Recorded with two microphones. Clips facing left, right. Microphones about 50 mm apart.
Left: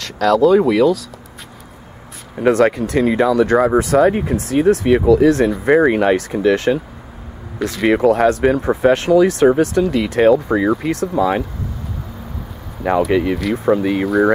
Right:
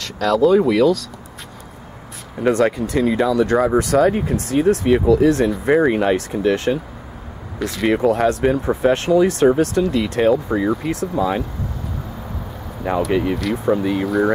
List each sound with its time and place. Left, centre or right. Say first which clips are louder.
0.0 s speech: left 3 dB; centre
2.3 s speech: left 3 dB; centre
5.0 s speech: left 3 dB; centre
5.8 s speech: left 3 dB; centre
7.5 s speech: left 3 dB; centre
13.0 s speech: left 3 dB; centre
14.0 s speech: left 4 dB; centre